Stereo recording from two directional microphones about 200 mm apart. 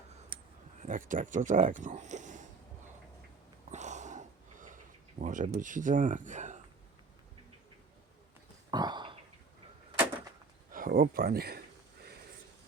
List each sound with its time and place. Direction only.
0.8 s speech: 40° right (ahead or behind)
3.7 s sniff: 35° right (ahead or behind)
5.2 s speech: 40° right (ahead or behind)
8.7 s a sound: 20° right (ahead or behind)
10.7 s speech: 45° right (ahead or behind)